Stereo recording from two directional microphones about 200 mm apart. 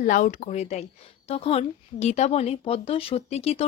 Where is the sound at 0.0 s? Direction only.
40° left (ahead or behind).